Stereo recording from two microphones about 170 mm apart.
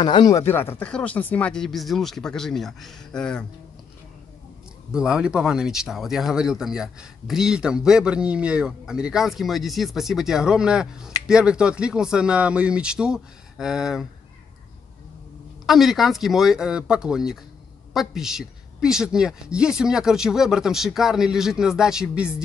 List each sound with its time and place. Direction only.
0.0 s speech: 25° left (ahead or behind)
0.5 s speech: 15° left (ahead or behind)
4.9 s speech: 5° right (ahead or behind)
15.6 s speech: centre (ahead or behind)